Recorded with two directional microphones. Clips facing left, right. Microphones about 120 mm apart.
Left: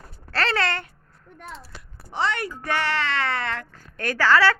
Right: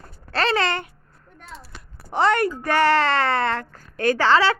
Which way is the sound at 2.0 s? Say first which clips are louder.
Right 7 dB; 50° right (ahead or behind).